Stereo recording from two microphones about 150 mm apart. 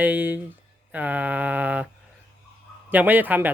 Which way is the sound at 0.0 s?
10° right (ahead or behind).